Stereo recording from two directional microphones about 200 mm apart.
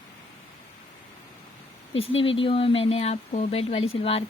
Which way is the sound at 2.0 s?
30° left (ahead or behind).